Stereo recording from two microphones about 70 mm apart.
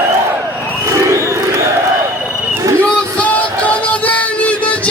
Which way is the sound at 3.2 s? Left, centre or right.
Centre.